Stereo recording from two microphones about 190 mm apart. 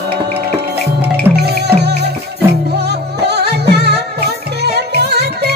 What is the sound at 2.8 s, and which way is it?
Music, 60° right (ahead or behind).